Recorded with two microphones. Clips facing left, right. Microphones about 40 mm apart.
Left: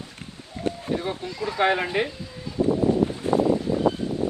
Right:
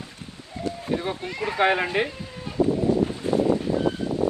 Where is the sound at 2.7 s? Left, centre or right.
Left.